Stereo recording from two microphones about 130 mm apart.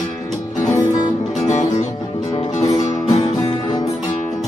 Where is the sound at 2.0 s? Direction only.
30° left (ahead or behind).